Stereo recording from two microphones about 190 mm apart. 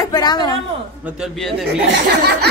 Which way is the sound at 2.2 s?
60° right (ahead or behind).